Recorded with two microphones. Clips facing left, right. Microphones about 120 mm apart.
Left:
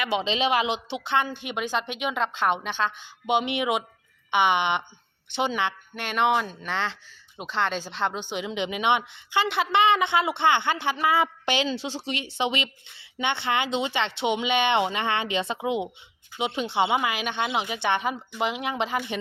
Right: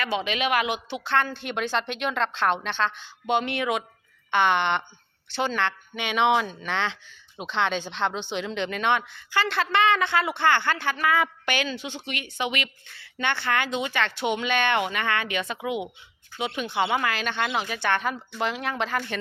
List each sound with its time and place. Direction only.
0.0 s a woman's voice: 20° left (ahead or behind)